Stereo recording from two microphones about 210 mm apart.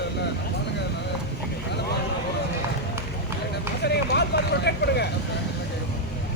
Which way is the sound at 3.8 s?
50° left (ahead or behind).